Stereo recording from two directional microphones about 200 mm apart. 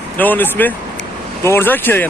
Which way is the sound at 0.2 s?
10° left (ahead or behind).